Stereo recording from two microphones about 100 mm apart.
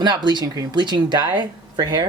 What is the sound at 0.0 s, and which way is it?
Speech, 45° right (ahead or behind).